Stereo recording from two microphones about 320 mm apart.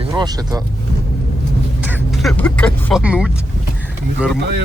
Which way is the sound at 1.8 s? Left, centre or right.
Centre.